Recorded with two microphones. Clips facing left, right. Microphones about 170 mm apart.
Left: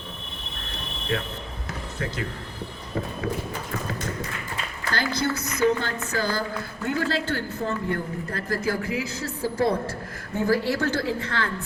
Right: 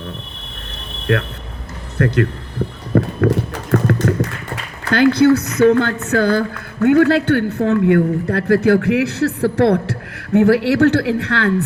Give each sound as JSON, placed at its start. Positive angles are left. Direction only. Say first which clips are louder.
{"t": 1.1, "sound": "a man's voice", "louder": "right 10 dB", "side_deg": -70}
{"t": 2.9, "sound": "a sound", "louder": "right 13 dB", "side_deg": -70}
{"t": 4.9, "sound": "a man's voice", "louder": "right 15 dB", "side_deg": -65}